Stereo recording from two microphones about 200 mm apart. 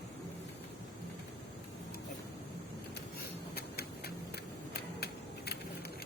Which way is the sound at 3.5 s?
50° left (ahead or behind).